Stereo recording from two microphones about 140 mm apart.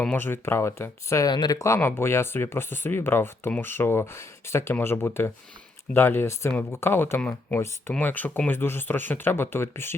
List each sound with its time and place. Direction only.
0.0 s speech: 15° left (ahead or behind)